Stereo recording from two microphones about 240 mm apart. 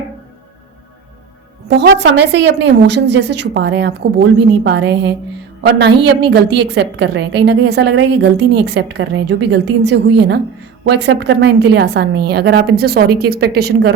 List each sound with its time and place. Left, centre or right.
1.6 s a woman's voice: right